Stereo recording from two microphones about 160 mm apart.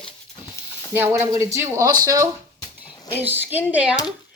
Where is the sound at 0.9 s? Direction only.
15° right (ahead or behind).